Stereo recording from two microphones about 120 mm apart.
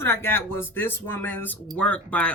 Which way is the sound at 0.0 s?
20° left (ahead or behind).